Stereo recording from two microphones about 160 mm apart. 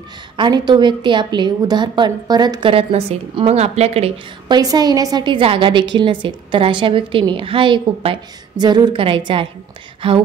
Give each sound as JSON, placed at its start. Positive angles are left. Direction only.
{"t": 0.4, "sound": "a woman's voice", "side_deg": -30}
{"t": 4.5, "sound": "a woman's voice", "side_deg": -25}